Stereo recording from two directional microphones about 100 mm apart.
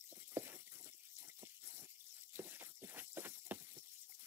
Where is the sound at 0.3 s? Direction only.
25° right (ahead or behind).